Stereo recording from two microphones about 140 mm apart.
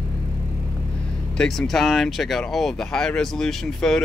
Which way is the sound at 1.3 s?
Centre (ahead or behind).